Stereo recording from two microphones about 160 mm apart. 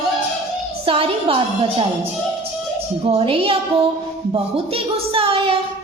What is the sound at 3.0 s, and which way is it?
A woman's voice, 40° right (ahead or behind).